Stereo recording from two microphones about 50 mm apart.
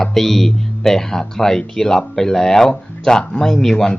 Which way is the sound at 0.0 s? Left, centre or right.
Centre.